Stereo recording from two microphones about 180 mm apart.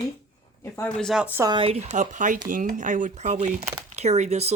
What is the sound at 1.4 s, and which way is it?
Speech, 25° right (ahead or behind).